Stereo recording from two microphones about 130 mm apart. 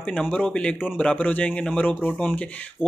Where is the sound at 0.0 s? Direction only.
5° left (ahead or behind).